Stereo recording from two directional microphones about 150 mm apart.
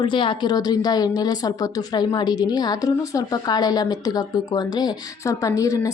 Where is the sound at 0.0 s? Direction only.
35° left (ahead or behind).